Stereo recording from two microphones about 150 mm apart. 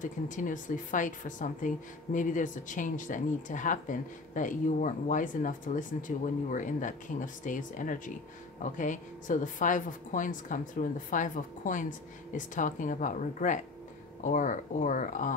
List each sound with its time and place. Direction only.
0.0 s speech: 60° left (ahead or behind)